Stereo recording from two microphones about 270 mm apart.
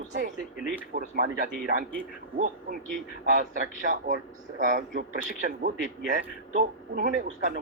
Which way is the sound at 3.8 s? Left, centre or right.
Right.